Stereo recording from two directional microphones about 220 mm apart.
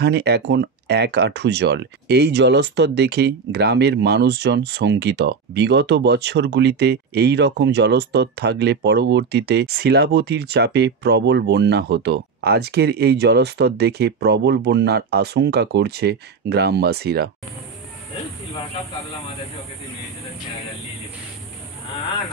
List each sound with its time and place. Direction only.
0.0 s speech: 50° right (ahead or behind)